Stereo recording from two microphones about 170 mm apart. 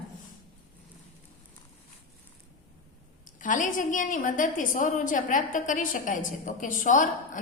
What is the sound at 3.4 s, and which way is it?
A woman's voice, 50° left (ahead or behind).